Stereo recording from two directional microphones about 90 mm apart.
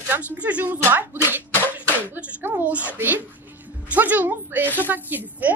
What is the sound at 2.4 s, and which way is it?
A woman's voice, 20° right (ahead or behind).